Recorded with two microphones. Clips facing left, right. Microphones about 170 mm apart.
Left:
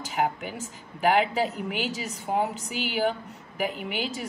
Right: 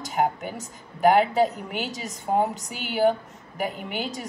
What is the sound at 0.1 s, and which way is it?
A woman's voice, 40° right (ahead or behind).